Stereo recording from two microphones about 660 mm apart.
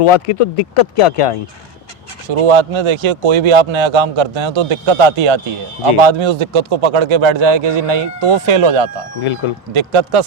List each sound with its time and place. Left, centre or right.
0.0 s speech: left
2.4 s a man's voice: right
9.3 s speech: left
9.7 s a man's voice: right